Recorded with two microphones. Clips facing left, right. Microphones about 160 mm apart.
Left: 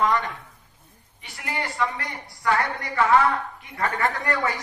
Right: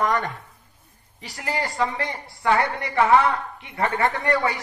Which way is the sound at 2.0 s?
25° right (ahead or behind).